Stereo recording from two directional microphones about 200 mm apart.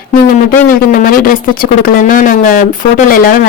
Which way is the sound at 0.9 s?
45° left (ahead or behind).